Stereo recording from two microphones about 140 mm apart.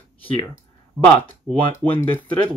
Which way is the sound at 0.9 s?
10° left (ahead or behind).